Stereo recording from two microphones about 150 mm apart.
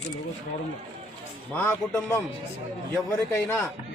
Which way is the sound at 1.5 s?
15° left (ahead or behind).